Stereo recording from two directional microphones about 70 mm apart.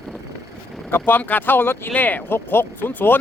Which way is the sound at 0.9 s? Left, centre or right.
Left.